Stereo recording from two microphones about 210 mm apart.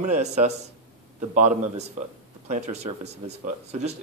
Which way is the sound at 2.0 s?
35° right (ahead or behind).